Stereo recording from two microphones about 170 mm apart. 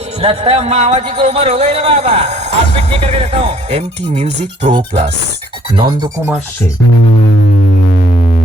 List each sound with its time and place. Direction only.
0.2 s speech: 35° right (ahead or behind)
4.7 s speech: 25° right (ahead or behind)